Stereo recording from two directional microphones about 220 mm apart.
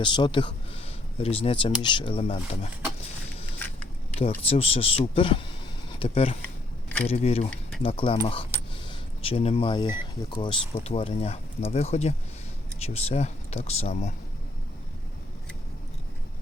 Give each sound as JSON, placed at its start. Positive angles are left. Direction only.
{"t": 0.0, "sound": "speech", "side_deg": 20}
{"t": 4.1, "sound": "speech", "side_deg": 25}